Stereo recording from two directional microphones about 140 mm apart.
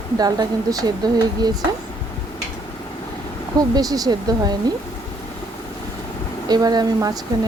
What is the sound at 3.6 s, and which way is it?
Speech, 25° right (ahead or behind).